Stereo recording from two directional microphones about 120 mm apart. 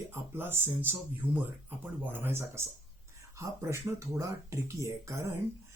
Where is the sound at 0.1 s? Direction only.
20° right (ahead or behind).